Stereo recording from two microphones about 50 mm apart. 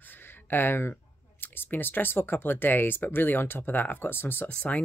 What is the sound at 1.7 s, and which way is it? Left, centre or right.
Speech, left.